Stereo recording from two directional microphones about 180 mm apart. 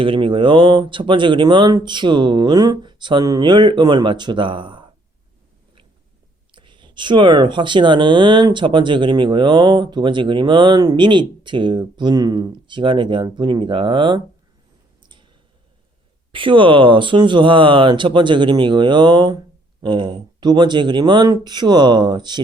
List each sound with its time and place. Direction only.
0.0 s speech: 30° right (ahead or behind)
6.5 s speech: 25° right (ahead or behind)
15.0 s a sound: 25° right (ahead or behind)
16.3 s speech: 30° right (ahead or behind)